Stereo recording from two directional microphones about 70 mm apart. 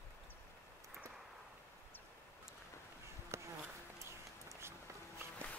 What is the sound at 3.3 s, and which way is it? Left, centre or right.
Bee, right.